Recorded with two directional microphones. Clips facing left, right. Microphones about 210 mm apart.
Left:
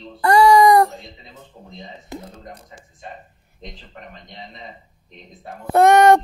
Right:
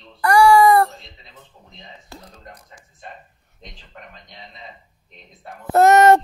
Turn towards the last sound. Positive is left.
turn(degrees=-5)  # may be behind; listen again after turning